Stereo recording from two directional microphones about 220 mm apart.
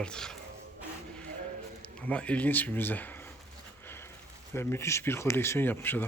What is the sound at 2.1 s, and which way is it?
Speech, 5° left (ahead or behind).